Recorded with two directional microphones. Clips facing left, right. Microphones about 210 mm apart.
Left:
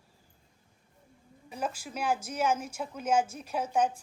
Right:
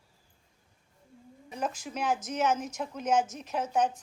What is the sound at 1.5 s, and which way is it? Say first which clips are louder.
Speech: right 1 dB; 5° left (ahead or behind).